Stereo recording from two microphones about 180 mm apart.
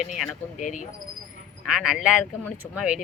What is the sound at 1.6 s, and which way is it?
Speech, 5° right (ahead or behind).